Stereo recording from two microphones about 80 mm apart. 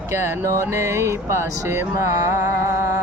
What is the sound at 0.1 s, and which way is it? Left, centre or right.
Speech, right.